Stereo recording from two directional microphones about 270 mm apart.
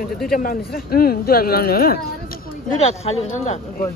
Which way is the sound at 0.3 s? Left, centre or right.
Left.